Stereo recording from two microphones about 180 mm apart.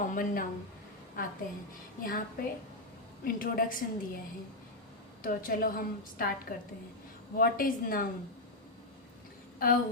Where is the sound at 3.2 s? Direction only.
50° left (ahead or behind).